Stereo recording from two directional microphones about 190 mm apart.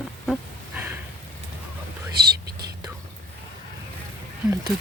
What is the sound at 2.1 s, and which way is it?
Whispering, 55° right (ahead or behind).